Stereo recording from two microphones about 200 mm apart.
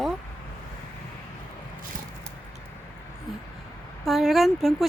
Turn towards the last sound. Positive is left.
turn(degrees=0)  # may be behind; listen again after turning